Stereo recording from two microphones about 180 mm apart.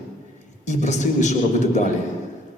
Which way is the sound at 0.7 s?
40° left (ahead or behind).